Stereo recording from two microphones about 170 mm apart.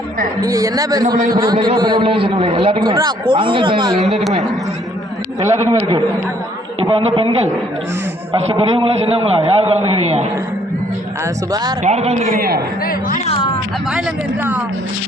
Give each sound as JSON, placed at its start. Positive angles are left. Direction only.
{"t": 0.4, "sound": "a man's voice", "side_deg": -20}
{"t": 4.0, "sound": "speech", "side_deg": 0}
{"t": 5.4, "sound": "a man's voice", "side_deg": -15}
{"t": 6.7, "sound": "a man's voice", "side_deg": -30}
{"t": 11.8, "sound": "a man's voice", "side_deg": -40}
{"t": 12.3, "sound": "a man's voice", "side_deg": -60}
{"t": 12.8, "sound": "speech", "side_deg": 55}
{"t": 13.2, "sound": "speech", "side_deg": 35}